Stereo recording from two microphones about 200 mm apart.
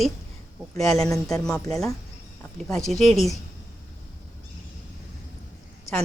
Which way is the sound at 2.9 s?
Centre (ahead or behind).